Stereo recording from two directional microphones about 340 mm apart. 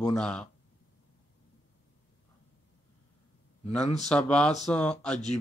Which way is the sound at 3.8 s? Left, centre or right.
Centre.